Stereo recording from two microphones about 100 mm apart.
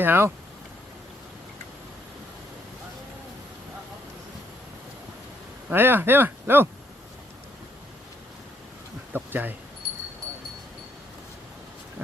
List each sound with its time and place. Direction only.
0.0 s speech: 20° right (ahead or behind)
5.7 s speech: 20° right (ahead or behind)
9.1 s speech: 20° right (ahead or behind)